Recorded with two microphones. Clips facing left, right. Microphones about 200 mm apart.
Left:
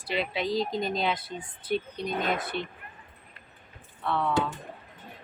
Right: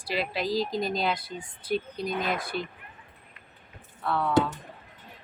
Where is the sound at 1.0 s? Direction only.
5° right (ahead or behind).